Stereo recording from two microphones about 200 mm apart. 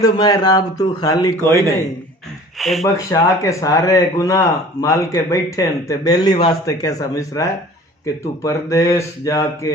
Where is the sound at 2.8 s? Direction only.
15° left (ahead or behind).